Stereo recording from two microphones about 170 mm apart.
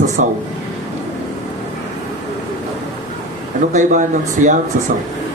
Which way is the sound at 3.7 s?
45° right (ahead or behind).